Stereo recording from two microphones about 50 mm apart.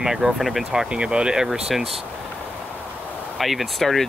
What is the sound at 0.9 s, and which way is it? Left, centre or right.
Speech, centre.